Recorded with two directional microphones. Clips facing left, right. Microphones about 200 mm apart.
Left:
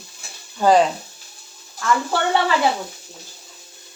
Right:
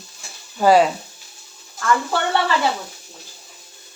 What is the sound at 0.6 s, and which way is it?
Speech, 10° right (ahead or behind).